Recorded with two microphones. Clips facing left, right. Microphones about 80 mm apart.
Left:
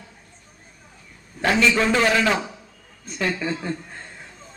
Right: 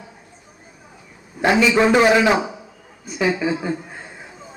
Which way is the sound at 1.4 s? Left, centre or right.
Centre.